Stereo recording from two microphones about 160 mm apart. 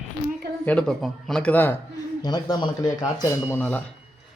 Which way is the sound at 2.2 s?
25° left (ahead or behind).